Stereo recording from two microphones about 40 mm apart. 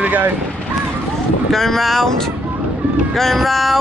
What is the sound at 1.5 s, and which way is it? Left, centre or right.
Speech, centre.